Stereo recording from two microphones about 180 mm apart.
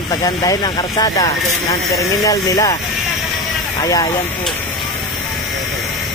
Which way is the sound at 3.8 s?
20° left (ahead or behind).